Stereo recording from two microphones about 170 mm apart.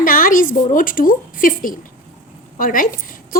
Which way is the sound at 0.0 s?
55° left (ahead or behind).